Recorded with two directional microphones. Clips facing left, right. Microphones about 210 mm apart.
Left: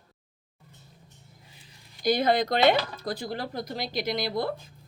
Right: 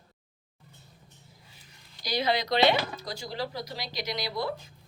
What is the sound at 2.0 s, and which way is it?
Speech, 50° left (ahead or behind).